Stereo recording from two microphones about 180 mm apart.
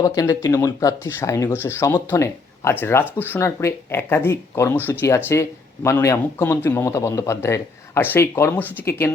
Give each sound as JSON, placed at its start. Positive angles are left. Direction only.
{"t": 0.0, "sound": "speech", "side_deg": 20}